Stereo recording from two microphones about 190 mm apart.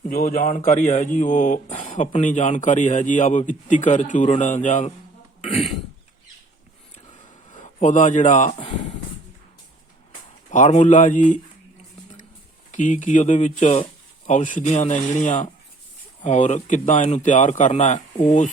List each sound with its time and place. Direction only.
0.0 s speech: 45° left (ahead or behind)
7.5 s speech: 40° left (ahead or behind)
10.5 s speech: 40° left (ahead or behind)
12.7 s speech: 40° left (ahead or behind)